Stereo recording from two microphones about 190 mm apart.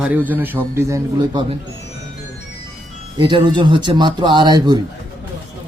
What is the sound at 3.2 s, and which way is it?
Speech, 25° right (ahead or behind).